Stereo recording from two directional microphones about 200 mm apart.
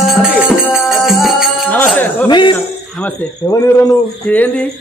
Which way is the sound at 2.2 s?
25° left (ahead or behind).